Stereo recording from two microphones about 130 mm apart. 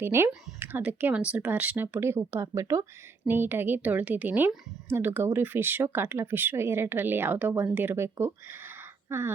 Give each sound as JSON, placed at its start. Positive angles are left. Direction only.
{"t": 0.0, "sound": "a woman's voice", "side_deg": -20}